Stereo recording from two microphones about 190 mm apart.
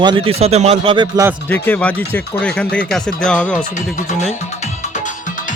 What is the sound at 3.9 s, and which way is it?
Music, 35° left (ahead or behind).